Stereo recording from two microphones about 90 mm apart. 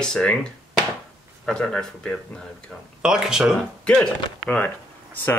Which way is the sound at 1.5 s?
10° left (ahead or behind).